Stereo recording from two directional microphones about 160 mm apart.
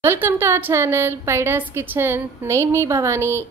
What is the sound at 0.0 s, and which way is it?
A woman's voice, 15° right (ahead or behind).